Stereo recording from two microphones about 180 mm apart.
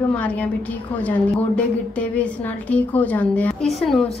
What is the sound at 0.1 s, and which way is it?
Speech, 10° left (ahead or behind).